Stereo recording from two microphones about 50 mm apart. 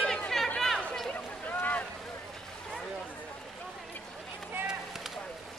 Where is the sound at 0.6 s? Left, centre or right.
Centre.